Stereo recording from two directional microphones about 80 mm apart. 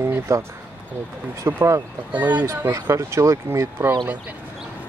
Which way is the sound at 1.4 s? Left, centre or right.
Right.